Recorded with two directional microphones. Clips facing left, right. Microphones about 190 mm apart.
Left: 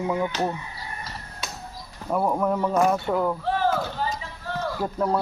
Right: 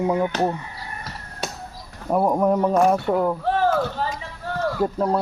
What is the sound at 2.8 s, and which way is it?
Speech, 30° right (ahead or behind).